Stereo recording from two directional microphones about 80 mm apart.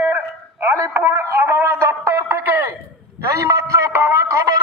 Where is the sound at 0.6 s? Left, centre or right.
Right.